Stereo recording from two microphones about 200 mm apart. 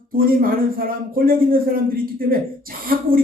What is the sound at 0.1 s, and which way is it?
A man's voice, 45° right (ahead or behind).